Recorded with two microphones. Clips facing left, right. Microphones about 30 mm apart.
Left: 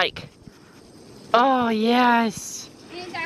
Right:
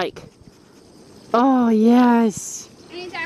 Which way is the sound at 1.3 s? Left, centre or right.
Left.